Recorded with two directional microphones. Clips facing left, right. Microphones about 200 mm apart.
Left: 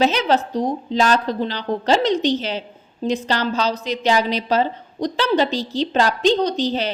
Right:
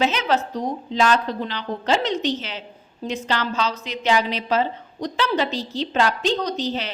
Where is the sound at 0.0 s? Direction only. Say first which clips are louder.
Left 4 dB; 35° left (ahead or behind).